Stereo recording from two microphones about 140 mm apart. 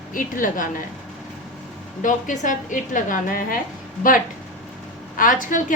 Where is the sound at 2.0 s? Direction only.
70° left (ahead or behind).